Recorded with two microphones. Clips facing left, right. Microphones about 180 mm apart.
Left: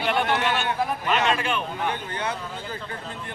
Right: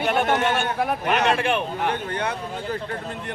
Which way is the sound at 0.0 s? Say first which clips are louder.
Right 3 dB; 45° right (ahead or behind).